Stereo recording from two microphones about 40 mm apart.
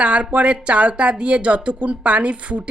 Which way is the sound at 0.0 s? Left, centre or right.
Right.